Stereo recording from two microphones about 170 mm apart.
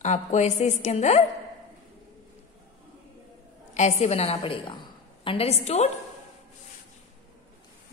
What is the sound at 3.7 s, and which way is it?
A woman's voice, 40° left (ahead or behind).